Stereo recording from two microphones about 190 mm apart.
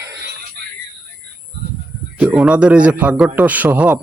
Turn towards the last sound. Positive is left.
turn(degrees=-10)  # may be behind; listen again after turning